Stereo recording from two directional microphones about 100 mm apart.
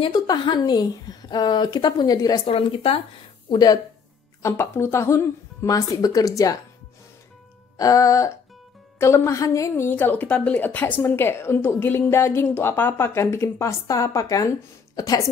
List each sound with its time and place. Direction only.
0.1 s speech: 45° left (ahead or behind)
2.4 s a woman's voice: 65° left (ahead or behind)
3.4 s speech: 40° left (ahead or behind)
4.4 s a woman's voice: 25° left (ahead or behind)
7.7 s a woman's voice: 35° left (ahead or behind)
9.8 s a woman's voice: 20° left (ahead or behind); by 15.2 s 35° left (ahead or behind)